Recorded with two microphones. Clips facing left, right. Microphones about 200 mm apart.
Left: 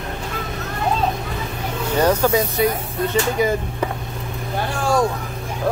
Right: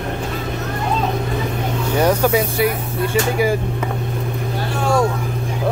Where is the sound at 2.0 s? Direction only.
10° right (ahead or behind).